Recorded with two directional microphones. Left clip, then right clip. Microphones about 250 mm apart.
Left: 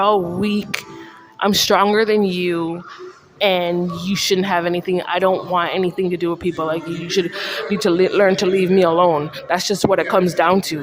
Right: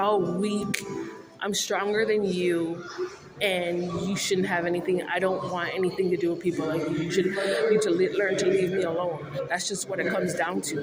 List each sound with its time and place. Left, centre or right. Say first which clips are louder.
0.0 s speech: left 8 dB; left
1.4 s speech: left 13 dB; left